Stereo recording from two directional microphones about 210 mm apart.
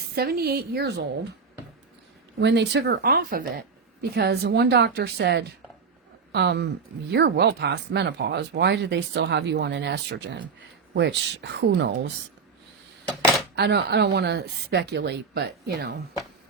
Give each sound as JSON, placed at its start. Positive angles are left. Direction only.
{"t": 0.2, "sound": "speech", "side_deg": -50}
{"t": 2.4, "sound": "speech", "side_deg": -55}
{"t": 13.6, "sound": "speech", "side_deg": -55}